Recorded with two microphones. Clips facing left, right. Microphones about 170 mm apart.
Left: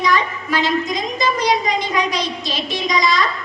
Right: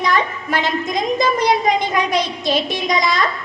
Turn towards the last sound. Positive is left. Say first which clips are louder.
# even
turn(degrees=-55)  # may be behind; listen again after turning